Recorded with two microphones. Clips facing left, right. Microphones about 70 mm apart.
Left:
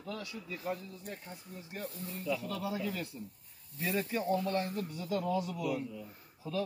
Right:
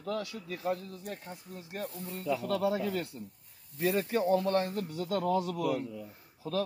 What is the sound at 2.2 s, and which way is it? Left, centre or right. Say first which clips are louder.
Speech: right 6 dB; right.